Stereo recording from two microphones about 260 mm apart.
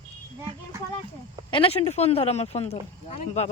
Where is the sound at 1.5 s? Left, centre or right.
Centre.